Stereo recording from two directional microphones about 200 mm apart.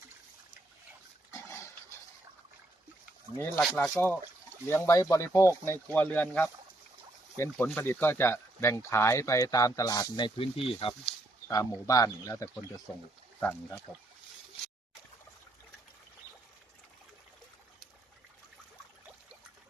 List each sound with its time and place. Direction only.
1.3 s pig: 15° left (ahead or behind)
3.3 s speech: 10° left (ahead or behind)
3.6 s speech: centre (ahead or behind); by 11.1 s 25° left (ahead or behind)
11.4 s speech: 15° left (ahead or behind)